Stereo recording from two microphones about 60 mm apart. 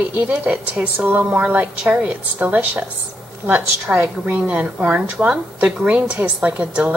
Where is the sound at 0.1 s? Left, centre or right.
Right.